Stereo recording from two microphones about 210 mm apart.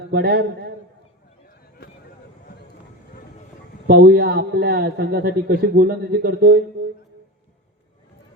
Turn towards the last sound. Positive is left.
turn(degrees=-50)  # may be behind; listen again after turning